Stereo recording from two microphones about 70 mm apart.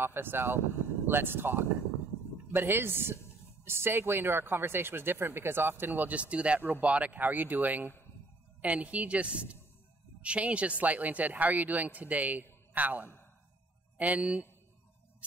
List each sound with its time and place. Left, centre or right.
0.0 s speech: right